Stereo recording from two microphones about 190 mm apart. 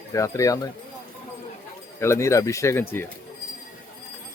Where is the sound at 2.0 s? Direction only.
15° left (ahead or behind).